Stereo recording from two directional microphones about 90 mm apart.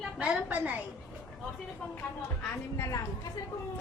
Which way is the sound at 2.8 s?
40° left (ahead or behind).